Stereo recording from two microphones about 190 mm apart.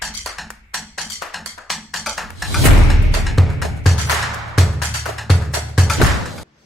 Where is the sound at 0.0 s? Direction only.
Centre (ahead or behind).